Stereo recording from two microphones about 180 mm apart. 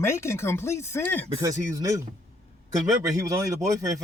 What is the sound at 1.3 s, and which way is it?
Speech, 20° right (ahead or behind).